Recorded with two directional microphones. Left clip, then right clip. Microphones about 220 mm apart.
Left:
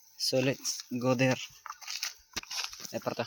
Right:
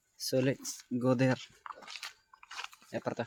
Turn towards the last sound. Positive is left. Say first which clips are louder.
# left 2 dB
turn(degrees=-5)  # may be behind; listen again after turning